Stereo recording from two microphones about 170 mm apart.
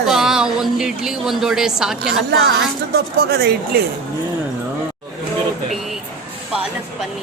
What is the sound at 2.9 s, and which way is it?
Speech, 70° right (ahead or behind).